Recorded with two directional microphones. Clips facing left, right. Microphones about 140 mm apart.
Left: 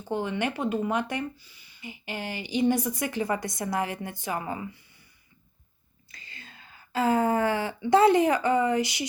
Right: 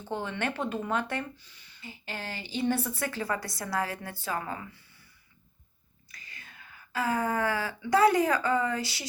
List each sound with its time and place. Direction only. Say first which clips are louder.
0.0 s speech: left 4 dB; 10° left (ahead or behind)
6.1 s speech: left 2 dB; 25° left (ahead or behind)